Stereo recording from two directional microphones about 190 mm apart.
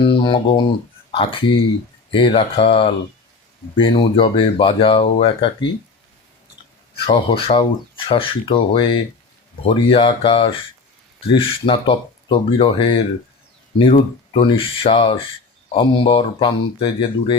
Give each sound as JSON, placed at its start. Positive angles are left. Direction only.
{"t": 0.0, "sound": "speech", "side_deg": 25}
{"t": 7.0, "sound": "speech", "side_deg": 30}